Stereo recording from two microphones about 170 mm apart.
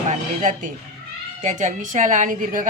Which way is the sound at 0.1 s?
50° right (ahead or behind).